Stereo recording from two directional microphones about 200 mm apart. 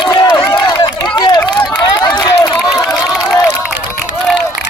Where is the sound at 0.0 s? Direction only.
20° left (ahead or behind).